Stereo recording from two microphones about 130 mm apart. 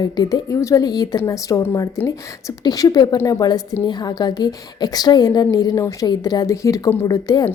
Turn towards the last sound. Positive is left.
turn(degrees=30)  # may be behind; listen again after turning